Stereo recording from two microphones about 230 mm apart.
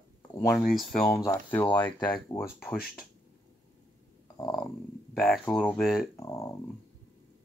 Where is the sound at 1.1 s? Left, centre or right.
Centre.